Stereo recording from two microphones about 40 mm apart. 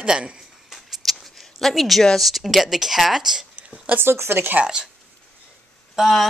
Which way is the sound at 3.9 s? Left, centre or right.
Right.